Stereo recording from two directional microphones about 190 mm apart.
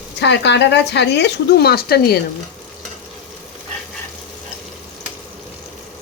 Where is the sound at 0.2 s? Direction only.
65° left (ahead or behind).